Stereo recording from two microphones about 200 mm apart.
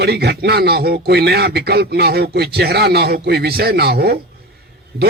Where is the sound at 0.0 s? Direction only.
55° right (ahead or behind).